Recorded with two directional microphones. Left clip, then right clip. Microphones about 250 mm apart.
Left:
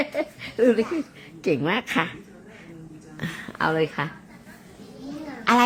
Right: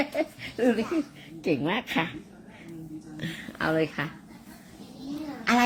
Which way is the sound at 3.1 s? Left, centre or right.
Left.